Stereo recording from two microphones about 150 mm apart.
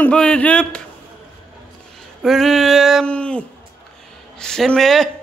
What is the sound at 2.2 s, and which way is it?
Speech, centre (ahead or behind).